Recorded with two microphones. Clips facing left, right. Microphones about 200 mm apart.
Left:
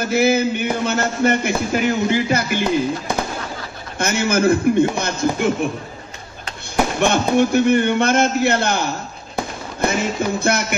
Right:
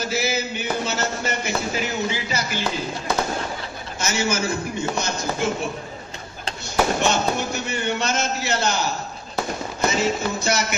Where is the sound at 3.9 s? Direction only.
55° left (ahead or behind).